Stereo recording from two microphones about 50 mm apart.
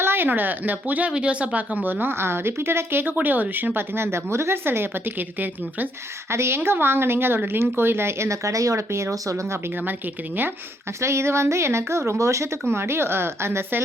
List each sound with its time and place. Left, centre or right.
0.0 s a woman's voice: right
3.2 s speech: right
3.9 s a woman's voice: right
6.3 s speech: right
6.6 s a woman's voice: right
11.0 s speech: right